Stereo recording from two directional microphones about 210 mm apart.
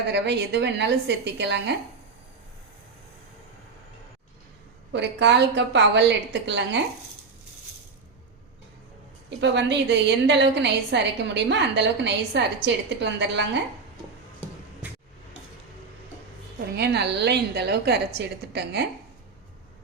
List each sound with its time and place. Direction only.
0.1 s a woman's voice: 55° right (ahead or behind)
4.9 s a woman's voice: 55° right (ahead or behind)
9.4 s a woman's voice: 55° right (ahead or behind)
16.7 s a woman's voice: 50° right (ahead or behind)